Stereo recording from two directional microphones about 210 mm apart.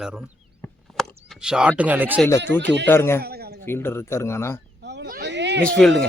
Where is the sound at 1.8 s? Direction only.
10° right (ahead or behind).